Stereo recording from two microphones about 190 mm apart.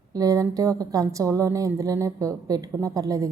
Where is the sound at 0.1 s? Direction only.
20° right (ahead or behind).